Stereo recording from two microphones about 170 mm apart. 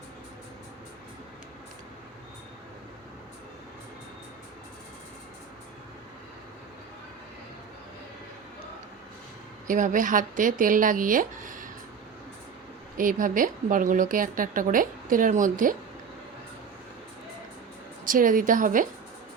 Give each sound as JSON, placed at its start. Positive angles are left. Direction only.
{"t": 9.6, "sound": "a woman's voice", "side_deg": -50}
{"t": 13.0, "sound": "a woman's voice", "side_deg": -50}
{"t": 18.0, "sound": "a woman's voice", "side_deg": -55}